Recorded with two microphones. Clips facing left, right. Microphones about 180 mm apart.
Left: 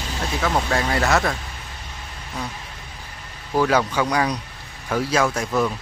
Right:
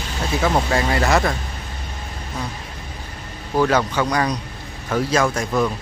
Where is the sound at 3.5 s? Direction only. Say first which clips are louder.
Right 1 dB; 5° left (ahead or behind).